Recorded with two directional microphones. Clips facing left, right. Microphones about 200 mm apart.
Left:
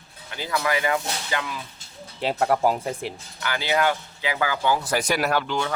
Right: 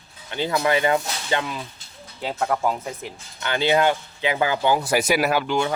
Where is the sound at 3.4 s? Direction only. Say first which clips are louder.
Right 4 dB; 25° right (ahead or behind).